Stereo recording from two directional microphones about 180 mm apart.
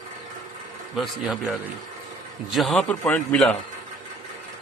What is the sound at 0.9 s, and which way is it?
A man's voice, centre (ahead or behind).